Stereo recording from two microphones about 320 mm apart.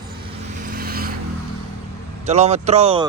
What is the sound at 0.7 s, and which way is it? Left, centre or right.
Vehicle, right.